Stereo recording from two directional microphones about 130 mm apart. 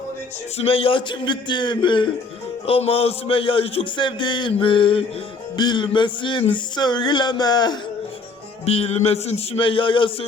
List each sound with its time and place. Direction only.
0.5 s speech: 50° left (ahead or behind); by 7.8 s 30° left (ahead or behind)
8.6 s speech: 50° left (ahead or behind)